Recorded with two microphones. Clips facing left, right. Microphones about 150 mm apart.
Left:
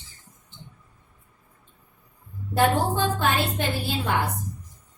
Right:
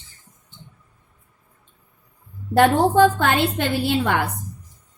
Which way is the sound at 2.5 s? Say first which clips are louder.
Right 7 dB; 85° right.